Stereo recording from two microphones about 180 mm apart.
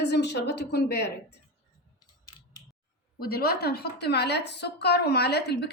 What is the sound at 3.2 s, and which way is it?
A woman's voice, 60° left (ahead or behind).